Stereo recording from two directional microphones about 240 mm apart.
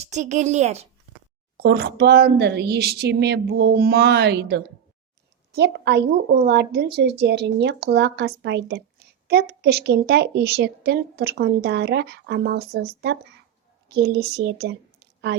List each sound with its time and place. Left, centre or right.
0.0 s a woman's voice: right
1.5 s a woman's voice: right